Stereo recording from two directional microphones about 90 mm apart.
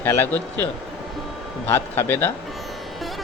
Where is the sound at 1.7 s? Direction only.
25° left (ahead or behind).